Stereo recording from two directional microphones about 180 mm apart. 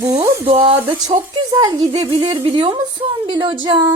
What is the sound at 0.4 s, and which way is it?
A woman's voice, 30° right (ahead or behind).